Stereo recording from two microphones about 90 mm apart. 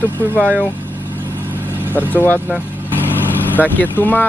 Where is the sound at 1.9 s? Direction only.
20° left (ahead or behind).